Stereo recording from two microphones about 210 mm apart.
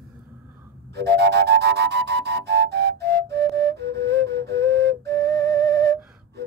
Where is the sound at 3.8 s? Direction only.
50° right (ahead or behind).